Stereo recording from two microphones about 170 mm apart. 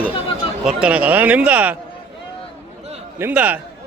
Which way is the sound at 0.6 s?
5° right (ahead or behind).